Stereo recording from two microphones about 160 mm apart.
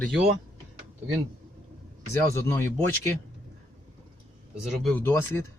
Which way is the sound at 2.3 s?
15° left (ahead or behind).